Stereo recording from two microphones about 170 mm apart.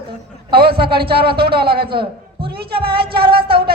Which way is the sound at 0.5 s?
65° right (ahead or behind).